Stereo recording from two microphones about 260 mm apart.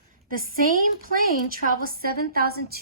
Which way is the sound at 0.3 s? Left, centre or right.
Right.